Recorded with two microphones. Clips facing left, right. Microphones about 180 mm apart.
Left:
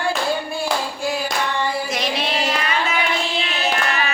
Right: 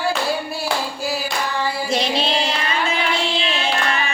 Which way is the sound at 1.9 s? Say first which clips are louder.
Right 3 dB; 30° right (ahead or behind).